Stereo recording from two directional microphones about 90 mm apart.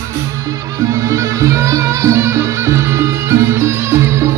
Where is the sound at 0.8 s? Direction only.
35° right (ahead or behind).